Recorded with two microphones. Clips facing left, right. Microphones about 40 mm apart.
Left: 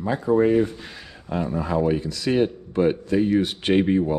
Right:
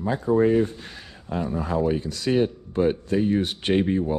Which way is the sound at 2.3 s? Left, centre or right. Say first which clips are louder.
Left 1 dB; left.